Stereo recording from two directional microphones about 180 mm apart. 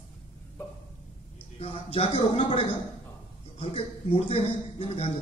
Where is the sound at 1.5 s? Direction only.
35° left (ahead or behind).